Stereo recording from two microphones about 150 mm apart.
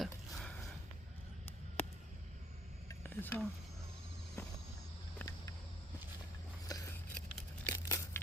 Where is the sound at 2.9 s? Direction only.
15° left (ahead or behind).